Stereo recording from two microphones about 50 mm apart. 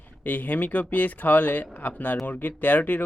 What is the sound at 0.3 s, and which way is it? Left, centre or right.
Speech, left.